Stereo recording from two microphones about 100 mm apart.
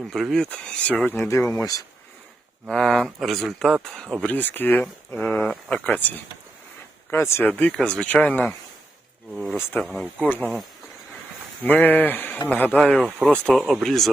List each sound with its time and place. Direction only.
0.1 s speech: centre (ahead or behind)
1.2 s speech: 25° left (ahead or behind)
2.6 s speech: 5° left (ahead or behind)
4.3 s speech: 20° left (ahead or behind)
7.5 s speech: 15° left (ahead or behind)
9.3 s speech: centre (ahead or behind)
10.2 s speech: 15° left (ahead or behind)
11.6 s speech: 15° left (ahead or behind); by 14.1 s centre (ahead or behind)